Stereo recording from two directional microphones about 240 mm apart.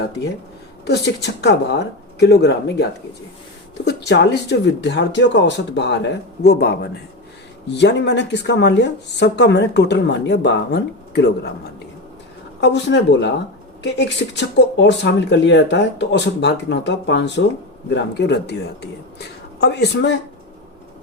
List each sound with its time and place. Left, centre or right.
0.9 s speech: left
3.8 s speech: left
12.5 s speech: left